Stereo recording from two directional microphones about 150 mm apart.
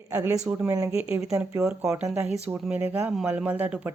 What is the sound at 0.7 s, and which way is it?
Speech, 20° right (ahead or behind).